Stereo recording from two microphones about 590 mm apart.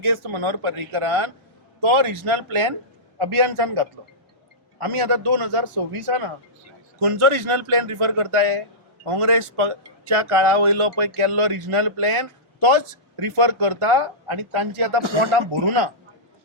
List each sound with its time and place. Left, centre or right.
0.0 s speech: right